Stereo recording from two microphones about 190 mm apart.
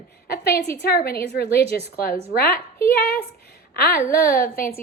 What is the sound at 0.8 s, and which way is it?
A woman's voice, 55° left (ahead or behind).